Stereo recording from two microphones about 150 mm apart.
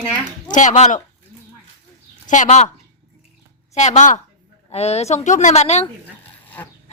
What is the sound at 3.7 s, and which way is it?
A woman's voice, 50° left (ahead or behind).